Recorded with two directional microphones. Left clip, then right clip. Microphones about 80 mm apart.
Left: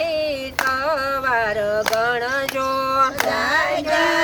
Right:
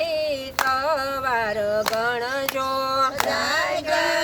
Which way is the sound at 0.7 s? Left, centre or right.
Right.